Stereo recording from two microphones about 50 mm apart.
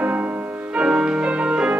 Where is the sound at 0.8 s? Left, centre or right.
Right.